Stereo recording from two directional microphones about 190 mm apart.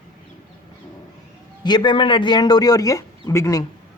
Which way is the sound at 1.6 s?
25° left (ahead or behind).